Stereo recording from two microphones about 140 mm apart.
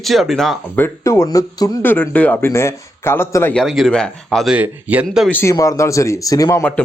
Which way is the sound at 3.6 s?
Centre (ahead or behind).